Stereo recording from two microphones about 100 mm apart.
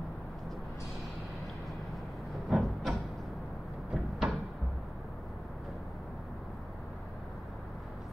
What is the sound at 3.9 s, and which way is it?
Cupboard open or close, 5° right (ahead or behind).